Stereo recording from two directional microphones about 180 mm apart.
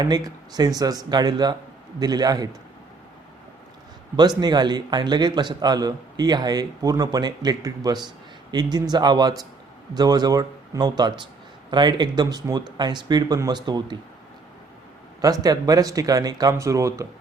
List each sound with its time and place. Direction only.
0.0 s a man's voice: 20° right (ahead or behind)
4.2 s a man's voice: 25° right (ahead or behind)
15.2 s a man's voice: 20° right (ahead or behind)